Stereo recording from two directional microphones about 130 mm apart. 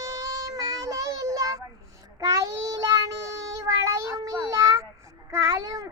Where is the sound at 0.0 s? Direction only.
25° right (ahead or behind).